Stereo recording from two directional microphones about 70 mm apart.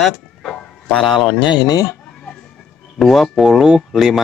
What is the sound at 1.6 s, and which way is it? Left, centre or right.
Speech, left.